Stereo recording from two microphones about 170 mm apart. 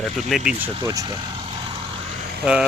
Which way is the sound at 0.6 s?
20° right (ahead or behind).